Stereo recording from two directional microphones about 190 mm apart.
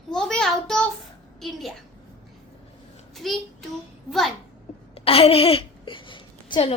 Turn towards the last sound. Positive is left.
turn(degrees=25)  # may be behind; listen again after turning